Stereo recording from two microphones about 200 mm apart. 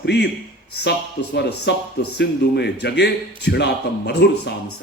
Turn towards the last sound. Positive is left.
turn(degrees=55)  # may be behind; listen again after turning